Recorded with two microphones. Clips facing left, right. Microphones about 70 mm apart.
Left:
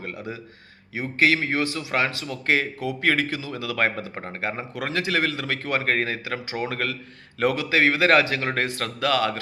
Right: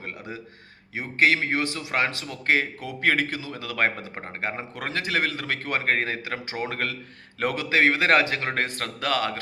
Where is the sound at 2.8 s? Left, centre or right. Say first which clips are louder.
Left 1 dB; right.